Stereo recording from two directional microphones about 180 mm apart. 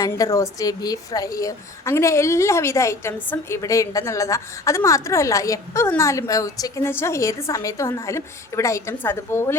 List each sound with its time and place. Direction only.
0.0 s a woman's voice: 20° left (ahead or behind)